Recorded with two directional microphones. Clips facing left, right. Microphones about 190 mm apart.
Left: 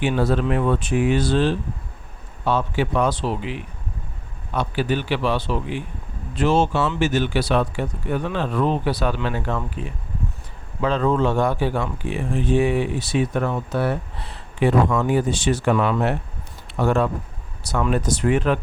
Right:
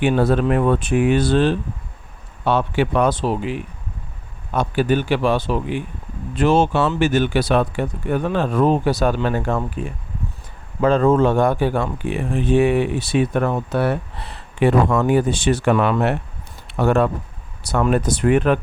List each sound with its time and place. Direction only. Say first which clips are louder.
0.0 s speech: right 4 dB; 55° right (ahead or behind)